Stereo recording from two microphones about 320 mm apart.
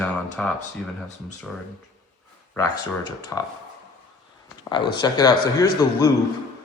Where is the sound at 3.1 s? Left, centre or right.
Centre.